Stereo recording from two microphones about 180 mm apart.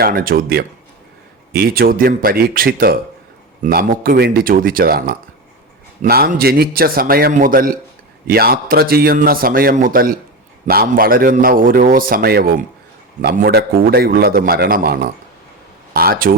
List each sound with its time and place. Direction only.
0.0 s a man's voice: 55° right (ahead or behind)